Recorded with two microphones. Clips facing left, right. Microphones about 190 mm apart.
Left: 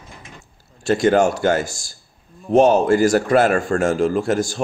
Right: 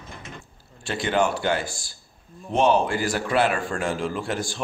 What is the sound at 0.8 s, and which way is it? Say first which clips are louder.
A man's voice: left 8 dB; 45° left (ahead or behind).